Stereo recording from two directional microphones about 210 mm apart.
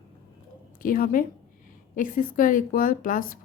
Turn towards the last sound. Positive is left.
turn(degrees=40)  # may be behind; listen again after turning